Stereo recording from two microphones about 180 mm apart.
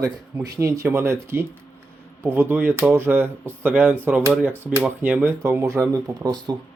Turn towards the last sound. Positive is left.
turn(degrees=-15)  # may be behind; listen again after turning